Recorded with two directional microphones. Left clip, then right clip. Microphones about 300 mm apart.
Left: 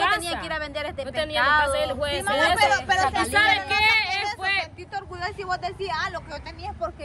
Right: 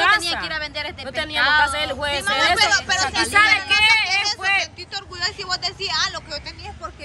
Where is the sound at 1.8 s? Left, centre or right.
Centre.